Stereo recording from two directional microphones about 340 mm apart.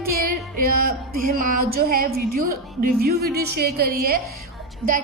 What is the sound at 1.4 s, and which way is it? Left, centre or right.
Speech, right.